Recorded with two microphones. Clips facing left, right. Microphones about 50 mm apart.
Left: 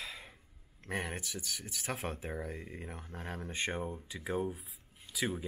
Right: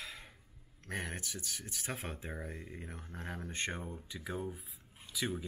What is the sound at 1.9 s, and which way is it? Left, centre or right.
Speech, centre.